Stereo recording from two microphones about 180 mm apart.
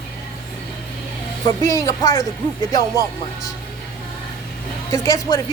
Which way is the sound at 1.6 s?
20° left (ahead or behind).